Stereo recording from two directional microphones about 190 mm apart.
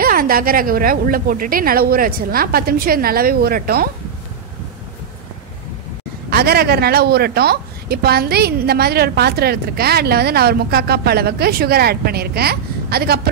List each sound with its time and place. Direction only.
0.0 s a woman's voice: 50° right (ahead or behind)
6.3 s speech: 55° right (ahead or behind)